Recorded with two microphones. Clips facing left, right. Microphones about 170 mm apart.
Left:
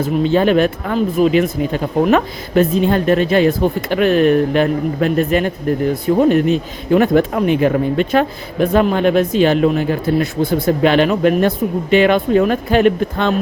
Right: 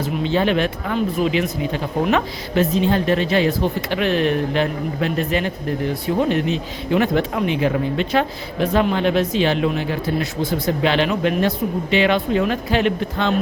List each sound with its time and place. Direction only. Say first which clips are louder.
0.0 s speech: left 5 dB; 45° left (ahead or behind)